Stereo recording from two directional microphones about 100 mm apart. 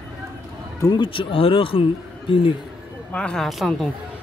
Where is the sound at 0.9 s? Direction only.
55° left (ahead or behind).